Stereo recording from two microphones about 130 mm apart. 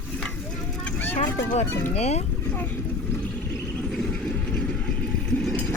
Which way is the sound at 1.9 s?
55° left (ahead or behind).